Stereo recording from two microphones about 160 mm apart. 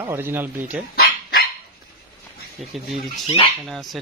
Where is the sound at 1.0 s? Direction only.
75° left (ahead or behind).